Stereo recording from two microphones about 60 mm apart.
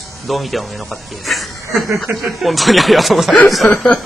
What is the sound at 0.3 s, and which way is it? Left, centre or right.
Speech, centre.